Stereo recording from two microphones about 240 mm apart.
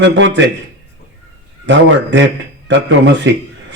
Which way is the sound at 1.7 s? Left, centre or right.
Right.